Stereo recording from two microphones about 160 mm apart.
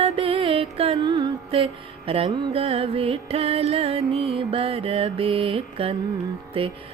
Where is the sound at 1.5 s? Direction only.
35° right (ahead or behind).